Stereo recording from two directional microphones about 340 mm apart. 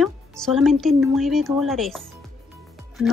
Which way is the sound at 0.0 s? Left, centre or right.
Centre.